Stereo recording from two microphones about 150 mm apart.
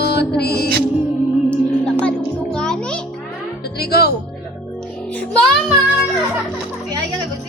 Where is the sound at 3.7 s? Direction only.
90° left.